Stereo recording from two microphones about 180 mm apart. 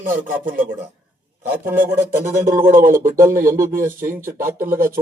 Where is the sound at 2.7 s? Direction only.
50° right (ahead or behind).